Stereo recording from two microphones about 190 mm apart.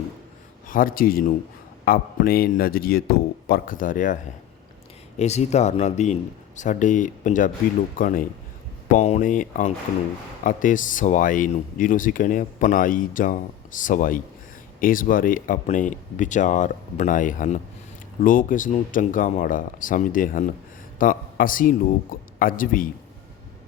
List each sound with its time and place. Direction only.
0.7 s speech: 45° left (ahead or behind)